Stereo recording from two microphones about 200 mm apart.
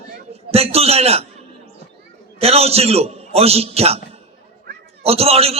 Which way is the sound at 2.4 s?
30° right (ahead or behind).